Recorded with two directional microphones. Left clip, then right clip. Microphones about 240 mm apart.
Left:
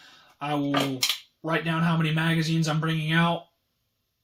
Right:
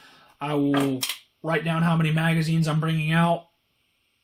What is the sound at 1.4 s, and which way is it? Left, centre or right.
Speech, right.